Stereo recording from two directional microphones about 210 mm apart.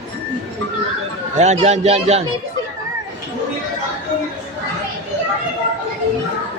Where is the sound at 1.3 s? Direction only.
35° right (ahead or behind).